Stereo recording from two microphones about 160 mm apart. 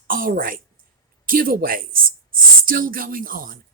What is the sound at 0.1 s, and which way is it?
Speech, 60° right (ahead or behind).